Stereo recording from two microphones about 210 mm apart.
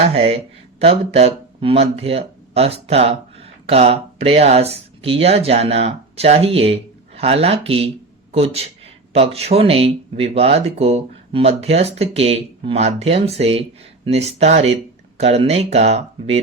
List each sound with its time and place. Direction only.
0.1 s a man's voice: 30° right (ahead or behind)